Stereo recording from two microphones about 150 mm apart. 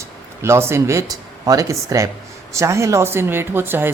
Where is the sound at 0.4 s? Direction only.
15° right (ahead or behind).